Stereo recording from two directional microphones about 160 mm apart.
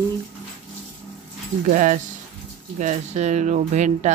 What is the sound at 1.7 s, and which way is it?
Speech, 55° right (ahead or behind).